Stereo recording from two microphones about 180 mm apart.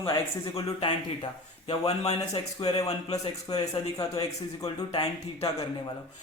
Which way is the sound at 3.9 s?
20° left (ahead or behind).